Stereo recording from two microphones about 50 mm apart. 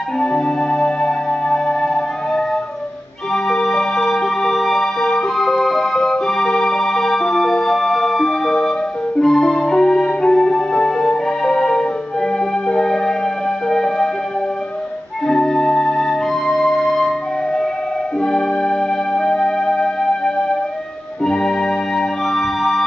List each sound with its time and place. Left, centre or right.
0.2 s music: centre
3.4 s music: centre
15.2 s music: centre
18.2 s music: centre